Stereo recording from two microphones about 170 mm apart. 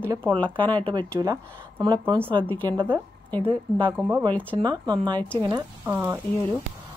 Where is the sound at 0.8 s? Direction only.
25° right (ahead or behind).